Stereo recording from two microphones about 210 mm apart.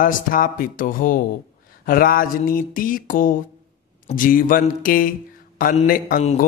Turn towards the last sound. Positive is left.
turn(degrees=35)  # may be behind; listen again after turning